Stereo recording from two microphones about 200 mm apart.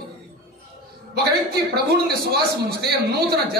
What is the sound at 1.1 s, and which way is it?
A man's voice, 55° right (ahead or behind).